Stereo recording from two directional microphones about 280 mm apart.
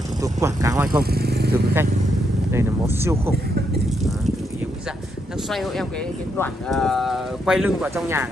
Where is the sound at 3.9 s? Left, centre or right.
Centre.